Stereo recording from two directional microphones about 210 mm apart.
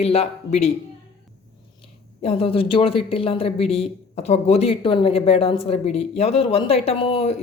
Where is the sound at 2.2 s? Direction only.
25° left (ahead or behind).